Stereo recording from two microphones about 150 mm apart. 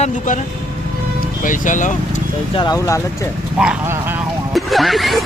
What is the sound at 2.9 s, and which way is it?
Speech, 20° left (ahead or behind).